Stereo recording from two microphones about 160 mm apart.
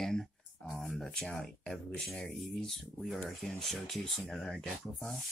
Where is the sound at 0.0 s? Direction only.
Centre (ahead or behind).